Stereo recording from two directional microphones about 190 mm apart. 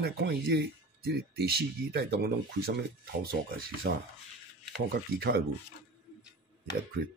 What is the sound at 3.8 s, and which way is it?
Speech, 65° right (ahead or behind).